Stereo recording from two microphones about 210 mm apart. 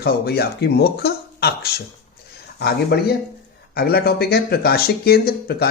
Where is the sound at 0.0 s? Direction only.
50° left (ahead or behind).